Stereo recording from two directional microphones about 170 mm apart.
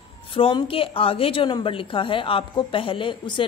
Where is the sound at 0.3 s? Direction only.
30° left (ahead or behind).